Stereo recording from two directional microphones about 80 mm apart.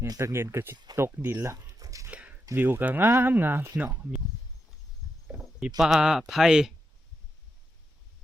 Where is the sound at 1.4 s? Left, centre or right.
Right.